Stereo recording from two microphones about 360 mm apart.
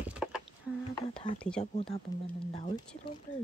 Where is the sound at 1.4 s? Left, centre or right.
Centre.